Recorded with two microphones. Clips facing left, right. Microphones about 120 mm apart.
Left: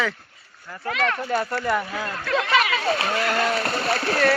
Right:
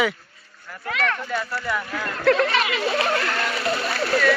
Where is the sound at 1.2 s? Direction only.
40° left (ahead or behind).